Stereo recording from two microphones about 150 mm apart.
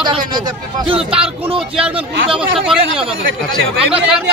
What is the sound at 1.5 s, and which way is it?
A man's voice, 5° right (ahead or behind).